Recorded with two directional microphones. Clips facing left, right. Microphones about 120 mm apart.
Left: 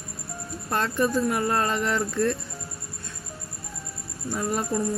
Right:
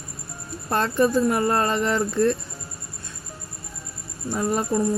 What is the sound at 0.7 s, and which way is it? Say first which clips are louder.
Speech: right 4 dB; 35° right (ahead or behind).